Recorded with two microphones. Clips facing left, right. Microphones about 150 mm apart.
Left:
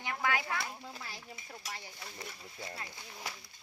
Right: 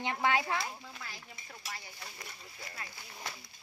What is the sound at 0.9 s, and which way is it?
Speech, 30° left (ahead or behind).